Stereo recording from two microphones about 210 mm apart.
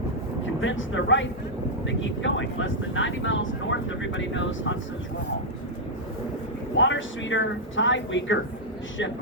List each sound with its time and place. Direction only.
0.6 s speech: 65° left (ahead or behind)
6.7 s speech: 65° left (ahead or behind)